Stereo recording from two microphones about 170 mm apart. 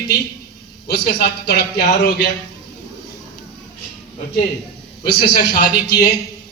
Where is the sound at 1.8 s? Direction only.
75° left (ahead or behind).